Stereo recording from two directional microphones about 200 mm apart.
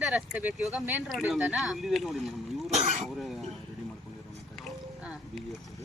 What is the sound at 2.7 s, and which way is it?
Cough, 35° right (ahead or behind).